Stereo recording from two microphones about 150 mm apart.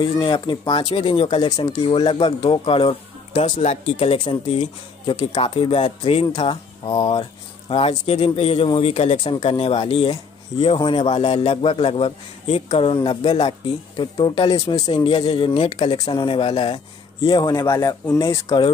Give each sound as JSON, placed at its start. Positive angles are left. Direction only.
{"t": 0.0, "sound": "a man's voice", "side_deg": 30}
{"t": 3.5, "sound": "speech", "side_deg": 50}
{"t": 3.9, "sound": "a man's voice", "side_deg": 40}
{"t": 7.7, "sound": "a man's voice", "side_deg": 45}